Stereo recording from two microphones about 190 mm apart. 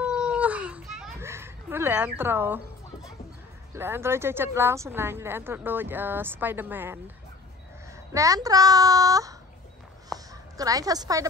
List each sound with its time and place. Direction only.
0.0 s baby cry: 5° right (ahead or behind)
1.2 s a sound: 15° right (ahead or behind)
3.7 s speech: 15° right (ahead or behind)
8.1 s a child's voice: 15° right (ahead or behind)